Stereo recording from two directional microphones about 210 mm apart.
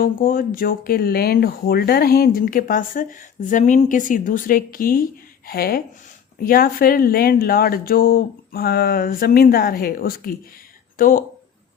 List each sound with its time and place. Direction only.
0.0 s speech: 45° left (ahead or behind)